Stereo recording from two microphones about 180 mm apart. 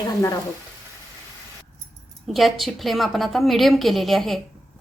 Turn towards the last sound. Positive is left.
turn(degrees=0)  # may be behind; listen again after turning